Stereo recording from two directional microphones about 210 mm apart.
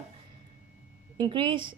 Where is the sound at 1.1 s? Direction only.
20° right (ahead or behind).